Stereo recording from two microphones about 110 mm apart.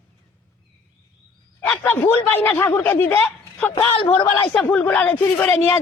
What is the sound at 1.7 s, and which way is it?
Speech, 20° left (ahead or behind).